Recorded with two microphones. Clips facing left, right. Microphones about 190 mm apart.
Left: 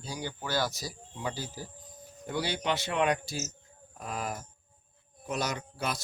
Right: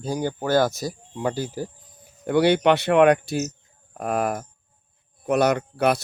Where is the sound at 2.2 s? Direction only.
65° right (ahead or behind).